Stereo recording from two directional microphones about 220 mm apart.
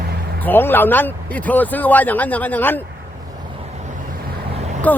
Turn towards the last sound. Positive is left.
turn(degrees=5)  # may be behind; listen again after turning